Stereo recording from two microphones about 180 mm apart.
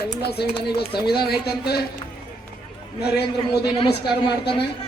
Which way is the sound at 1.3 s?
60° left (ahead or behind).